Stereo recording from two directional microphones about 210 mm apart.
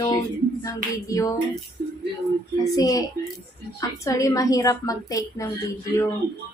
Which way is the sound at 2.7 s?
15° left (ahead or behind).